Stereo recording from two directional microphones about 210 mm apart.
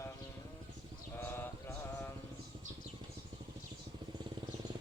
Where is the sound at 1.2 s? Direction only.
10° left (ahead or behind).